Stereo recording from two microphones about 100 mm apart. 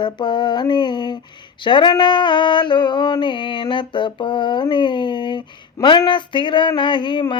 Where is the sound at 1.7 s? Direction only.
50° left (ahead or behind).